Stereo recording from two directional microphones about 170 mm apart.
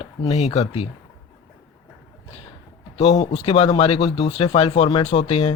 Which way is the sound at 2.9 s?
35° left (ahead or behind).